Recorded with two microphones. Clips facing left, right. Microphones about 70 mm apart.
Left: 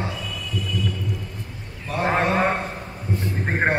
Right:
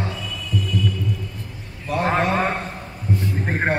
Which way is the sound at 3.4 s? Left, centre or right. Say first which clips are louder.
Left 2 dB; centre.